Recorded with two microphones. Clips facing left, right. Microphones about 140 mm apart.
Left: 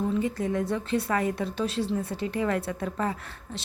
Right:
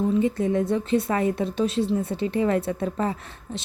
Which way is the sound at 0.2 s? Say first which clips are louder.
Right 5 dB; 20° right (ahead or behind).